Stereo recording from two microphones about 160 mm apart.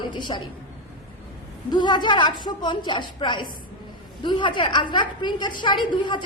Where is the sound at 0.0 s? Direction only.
30° left (ahead or behind).